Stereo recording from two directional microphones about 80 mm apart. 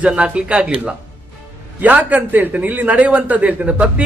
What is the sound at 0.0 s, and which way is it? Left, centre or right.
A man's voice, centre.